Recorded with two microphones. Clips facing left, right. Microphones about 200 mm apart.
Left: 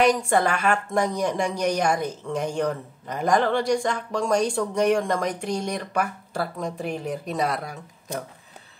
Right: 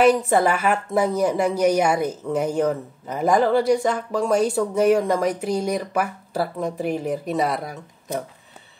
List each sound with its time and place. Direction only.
0.0 s a woman's voice: 5° right (ahead or behind)